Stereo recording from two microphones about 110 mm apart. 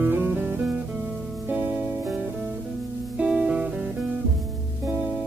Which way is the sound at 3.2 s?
10° right (ahead or behind).